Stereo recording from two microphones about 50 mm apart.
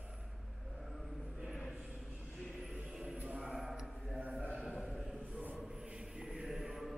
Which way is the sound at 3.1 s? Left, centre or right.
Right.